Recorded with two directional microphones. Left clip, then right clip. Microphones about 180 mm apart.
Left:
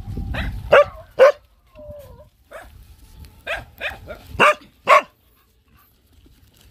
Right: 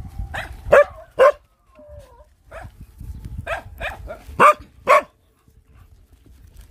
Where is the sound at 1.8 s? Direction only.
15° right (ahead or behind).